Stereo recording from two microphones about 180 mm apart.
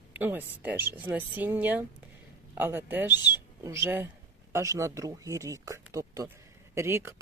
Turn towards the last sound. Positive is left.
turn(degrees=-15)  # may be behind; listen again after turning